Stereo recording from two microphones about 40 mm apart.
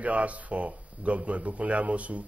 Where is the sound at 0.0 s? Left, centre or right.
Right.